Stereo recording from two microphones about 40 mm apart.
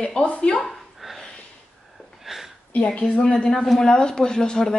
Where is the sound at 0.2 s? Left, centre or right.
Left.